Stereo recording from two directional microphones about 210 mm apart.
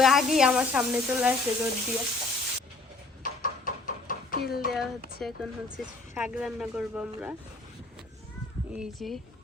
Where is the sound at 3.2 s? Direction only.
40° left (ahead or behind).